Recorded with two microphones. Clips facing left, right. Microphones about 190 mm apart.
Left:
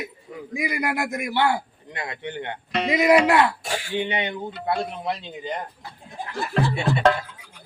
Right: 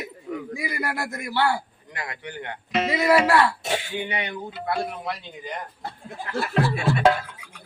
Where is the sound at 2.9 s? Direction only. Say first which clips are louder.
Left 3 dB; 20° left (ahead or behind).